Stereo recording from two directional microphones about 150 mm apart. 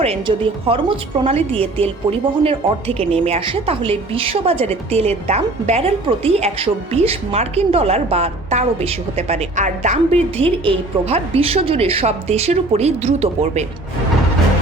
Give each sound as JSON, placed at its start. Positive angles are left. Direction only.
{"t": 0.0, "sound": "a woman's voice", "side_deg": -40}